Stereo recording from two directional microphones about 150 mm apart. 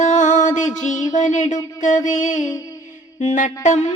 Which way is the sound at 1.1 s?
55° left (ahead or behind).